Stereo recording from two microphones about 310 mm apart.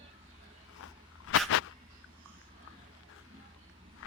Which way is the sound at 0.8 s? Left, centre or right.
Left.